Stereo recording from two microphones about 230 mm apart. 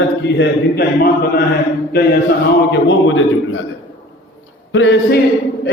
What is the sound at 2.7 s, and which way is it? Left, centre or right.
Speech, left.